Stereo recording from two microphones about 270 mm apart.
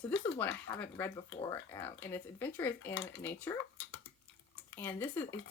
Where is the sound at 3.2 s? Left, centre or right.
Centre.